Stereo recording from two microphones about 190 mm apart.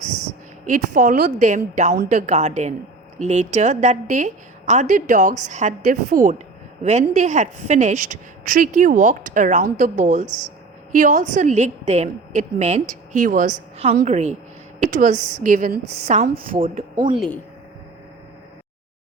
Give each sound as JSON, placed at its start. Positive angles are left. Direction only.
{"t": 0.0, "sound": "a woman's voice", "side_deg": -40}
{"t": 17.2, "sound": "speech", "side_deg": 5}